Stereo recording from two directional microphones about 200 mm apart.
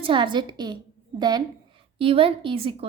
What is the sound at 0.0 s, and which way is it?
Speech, 25° right (ahead or behind).